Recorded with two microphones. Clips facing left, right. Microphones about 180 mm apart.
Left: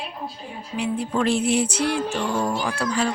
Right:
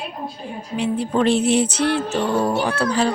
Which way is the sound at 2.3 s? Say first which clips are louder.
Right 5 dB; 65° right (ahead or behind).